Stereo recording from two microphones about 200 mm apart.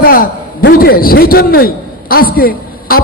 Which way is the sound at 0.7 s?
45° left (ahead or behind).